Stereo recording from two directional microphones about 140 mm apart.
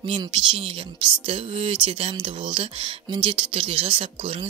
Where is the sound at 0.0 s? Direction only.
40° right (ahead or behind).